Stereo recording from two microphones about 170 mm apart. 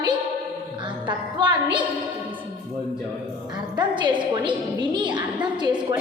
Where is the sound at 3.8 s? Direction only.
25° right (ahead or behind).